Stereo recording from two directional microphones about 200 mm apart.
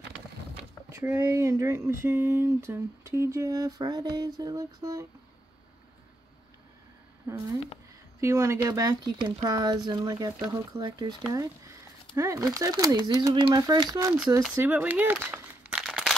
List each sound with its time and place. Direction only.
0.9 s speech: 15° right (ahead or behind)
8.2 s speech: 15° right (ahead or behind)
14.1 s speech: 5° right (ahead or behind)